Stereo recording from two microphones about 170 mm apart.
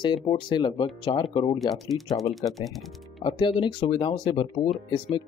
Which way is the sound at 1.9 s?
Centre (ahead or behind).